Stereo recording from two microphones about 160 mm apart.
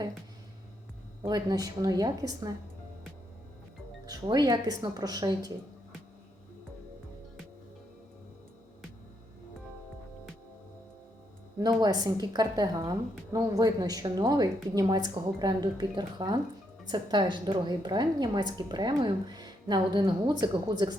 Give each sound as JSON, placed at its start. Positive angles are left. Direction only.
{"t": 1.3, "sound": "a woman's voice", "side_deg": -25}
{"t": 4.0, "sound": "a woman's voice", "side_deg": -25}
{"t": 11.8, "sound": "a woman's voice", "side_deg": -25}